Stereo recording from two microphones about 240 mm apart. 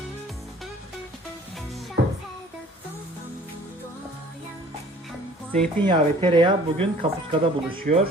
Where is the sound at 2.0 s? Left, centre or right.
Right.